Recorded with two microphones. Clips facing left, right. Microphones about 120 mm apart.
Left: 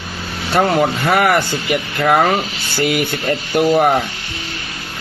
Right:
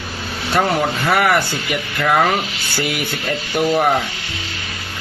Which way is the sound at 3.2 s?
Centre (ahead or behind).